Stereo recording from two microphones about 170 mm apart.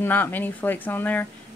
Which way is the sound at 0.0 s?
10° left (ahead or behind).